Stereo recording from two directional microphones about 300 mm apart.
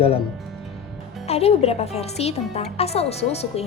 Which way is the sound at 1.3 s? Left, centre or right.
Centre.